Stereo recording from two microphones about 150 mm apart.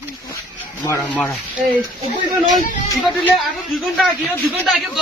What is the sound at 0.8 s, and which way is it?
Speech, 10° left (ahead or behind).